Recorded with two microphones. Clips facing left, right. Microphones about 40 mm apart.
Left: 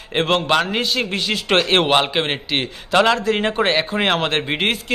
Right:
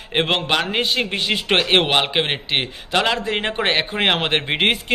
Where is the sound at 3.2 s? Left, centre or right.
Right.